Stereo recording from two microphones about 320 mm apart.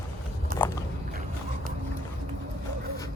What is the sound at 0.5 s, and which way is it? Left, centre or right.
Walk, right.